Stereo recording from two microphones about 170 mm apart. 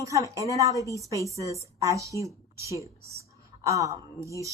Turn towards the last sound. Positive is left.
turn(degrees=-20)  # may be behind; listen again after turning